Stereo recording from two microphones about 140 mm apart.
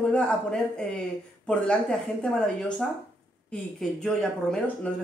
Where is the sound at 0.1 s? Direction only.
5° left (ahead or behind).